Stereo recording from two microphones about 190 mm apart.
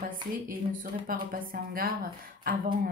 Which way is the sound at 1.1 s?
50° right (ahead or behind).